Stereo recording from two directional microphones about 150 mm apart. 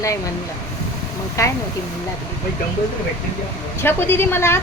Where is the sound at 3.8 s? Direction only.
15° left (ahead or behind).